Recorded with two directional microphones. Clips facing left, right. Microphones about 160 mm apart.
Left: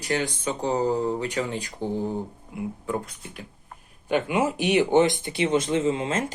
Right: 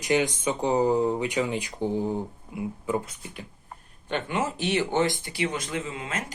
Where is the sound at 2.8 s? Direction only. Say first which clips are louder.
Right 4 dB; 5° right (ahead or behind).